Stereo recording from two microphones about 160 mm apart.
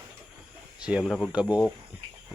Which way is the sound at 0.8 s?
5° right (ahead or behind).